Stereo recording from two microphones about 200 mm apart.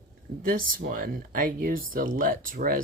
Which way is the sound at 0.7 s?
45° right (ahead or behind).